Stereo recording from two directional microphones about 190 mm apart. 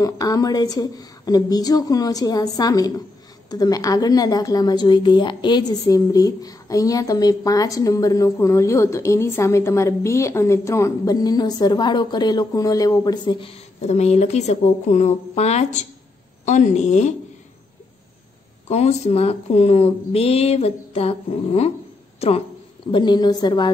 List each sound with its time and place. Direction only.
0.0 s a woman's voice: 20° left (ahead or behind); by 17.1 s 40° left (ahead or behind)
18.7 s a woman's voice: 35° left (ahead or behind)